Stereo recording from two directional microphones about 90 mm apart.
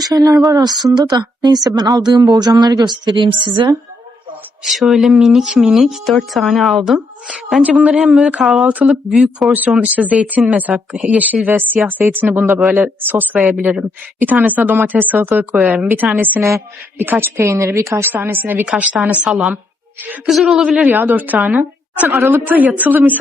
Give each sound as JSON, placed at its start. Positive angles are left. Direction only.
{"t": 0.0, "sound": "a woman's voice", "side_deg": -45}
{"t": 4.6, "sound": "speech", "side_deg": 0}
{"t": 7.6, "sound": "speech", "side_deg": -15}
{"t": 8.6, "sound": "speech", "side_deg": -15}
{"t": 9.0, "sound": "speech", "side_deg": 0}
{"t": 9.5, "sound": "speech", "side_deg": -15}
{"t": 16.4, "sound": "speech", "side_deg": -35}
{"t": 18.6, "sound": "speech", "side_deg": -10}
{"t": 20.8, "sound": "a woman's voice", "side_deg": -20}